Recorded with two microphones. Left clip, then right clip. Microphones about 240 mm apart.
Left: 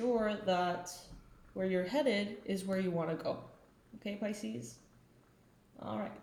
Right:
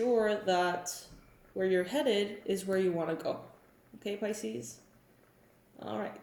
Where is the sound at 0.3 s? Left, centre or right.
Left.